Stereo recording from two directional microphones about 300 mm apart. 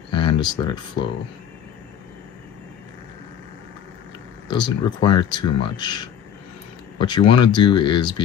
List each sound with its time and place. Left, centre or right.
0.1 s speech: centre
4.5 s speech: centre